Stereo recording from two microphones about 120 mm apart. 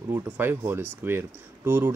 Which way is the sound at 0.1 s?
20° right (ahead or behind).